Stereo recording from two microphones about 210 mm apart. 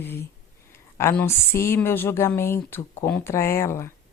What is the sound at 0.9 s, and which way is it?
Speech, 10° left (ahead or behind).